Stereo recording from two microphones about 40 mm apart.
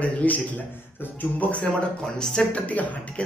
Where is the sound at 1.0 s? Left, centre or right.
Left.